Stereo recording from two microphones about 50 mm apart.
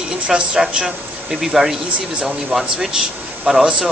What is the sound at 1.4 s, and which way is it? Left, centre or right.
Speech, centre.